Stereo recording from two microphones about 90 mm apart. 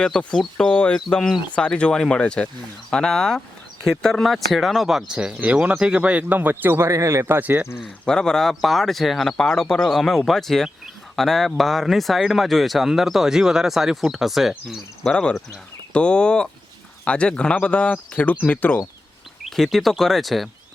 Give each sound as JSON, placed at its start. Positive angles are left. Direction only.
{"t": 0.0, "sound": "speech", "side_deg": 10}
{"t": 8.0, "sound": "speech", "side_deg": 5}
{"t": 15.1, "sound": "speech", "side_deg": 10}
{"t": 19.5, "sound": "speech", "side_deg": 0}